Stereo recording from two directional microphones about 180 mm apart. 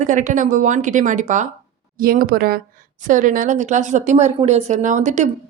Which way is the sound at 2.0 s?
55° right (ahead or behind).